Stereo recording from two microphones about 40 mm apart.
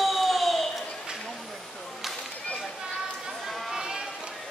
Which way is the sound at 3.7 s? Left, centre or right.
Centre.